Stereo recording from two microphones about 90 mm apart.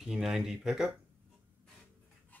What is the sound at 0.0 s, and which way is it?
Speech, 5° right (ahead or behind).